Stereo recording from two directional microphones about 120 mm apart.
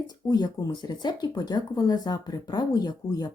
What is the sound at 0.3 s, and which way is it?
Speech, 35° left (ahead or behind).